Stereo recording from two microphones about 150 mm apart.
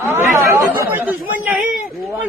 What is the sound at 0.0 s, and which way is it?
Chatter, 15° right (ahead or behind).